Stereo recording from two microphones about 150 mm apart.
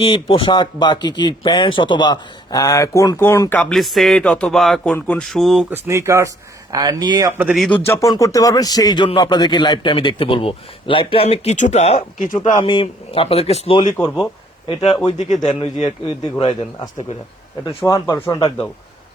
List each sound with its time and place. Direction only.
0.0 s speech: 35° left (ahead or behind); by 3.6 s 15° left (ahead or behind)
3.6 s speech: centre (ahead or behind)
5.7 s speech: 20° right (ahead or behind)
7.3 s speech: 10° right (ahead or behind)
7.9 s a man's voice: 20° left (ahead or behind); by 12.0 s 45° left (ahead or behind)
12.3 s a man's voice: 30° left (ahead or behind)
17.8 s speech: 20° left (ahead or behind)